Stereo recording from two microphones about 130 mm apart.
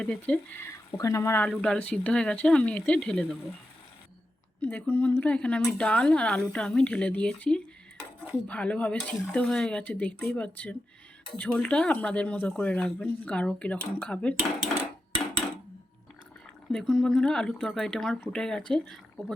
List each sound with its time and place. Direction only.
0.0 s speech: 10° left (ahead or behind)
0.6 s speech: 25° left (ahead or behind); by 3.2 s 5° left (ahead or behind)
4.6 s speech: 10° left (ahead or behind)
16.7 s speech: 5° left (ahead or behind)